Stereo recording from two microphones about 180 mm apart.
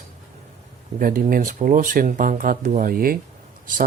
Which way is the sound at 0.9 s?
50° right (ahead or behind).